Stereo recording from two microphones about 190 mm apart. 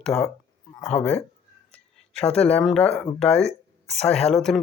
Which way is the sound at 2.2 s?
30° left (ahead or behind).